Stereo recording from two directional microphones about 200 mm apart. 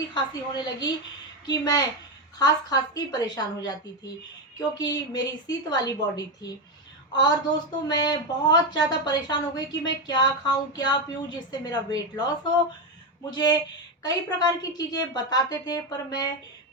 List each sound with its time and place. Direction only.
0.1 s a woman's voice: 20° left (ahead or behind)
4.8 s a woman's voice: 20° left (ahead or behind)